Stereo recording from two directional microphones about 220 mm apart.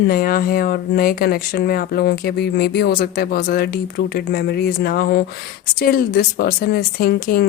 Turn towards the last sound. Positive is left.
turn(degrees=40)  # may be behind; listen again after turning